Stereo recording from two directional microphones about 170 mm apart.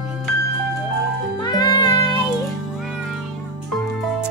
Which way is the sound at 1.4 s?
25° left (ahead or behind).